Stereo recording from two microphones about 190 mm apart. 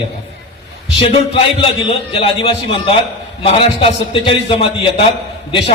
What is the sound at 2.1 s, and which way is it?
A man's voice, 30° left (ahead or behind).